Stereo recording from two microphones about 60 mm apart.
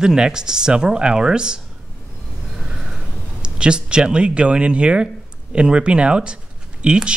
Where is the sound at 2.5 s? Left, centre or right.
Centre.